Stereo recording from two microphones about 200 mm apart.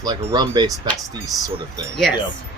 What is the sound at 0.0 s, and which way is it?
Speech, 20° right (ahead or behind).